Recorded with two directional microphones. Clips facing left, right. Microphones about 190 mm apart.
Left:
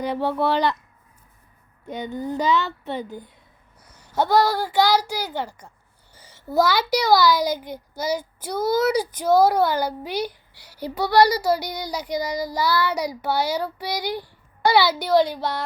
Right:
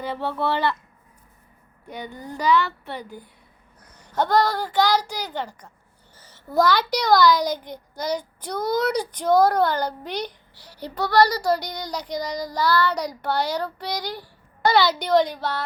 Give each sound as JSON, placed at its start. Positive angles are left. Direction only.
{"t": 0.0, "sound": "a child's voice", "side_deg": 15}
{"t": 1.9, "sound": "a child's voice", "side_deg": 20}
{"t": 3.8, "sound": "a woman's voice", "side_deg": 10}